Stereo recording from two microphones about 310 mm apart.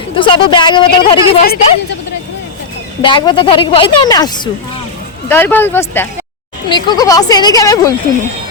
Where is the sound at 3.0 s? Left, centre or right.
Centre.